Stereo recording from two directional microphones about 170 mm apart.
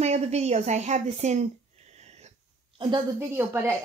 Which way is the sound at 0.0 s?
40° right (ahead or behind).